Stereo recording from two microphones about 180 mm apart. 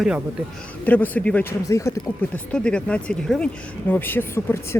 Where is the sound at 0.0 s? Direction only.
5° right (ahead or behind).